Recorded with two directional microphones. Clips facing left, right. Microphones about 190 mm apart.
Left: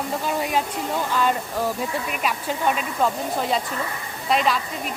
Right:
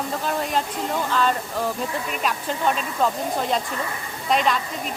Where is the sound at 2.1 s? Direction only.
5° left (ahead or behind).